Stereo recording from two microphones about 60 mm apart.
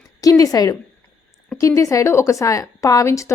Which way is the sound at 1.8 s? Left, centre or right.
Left.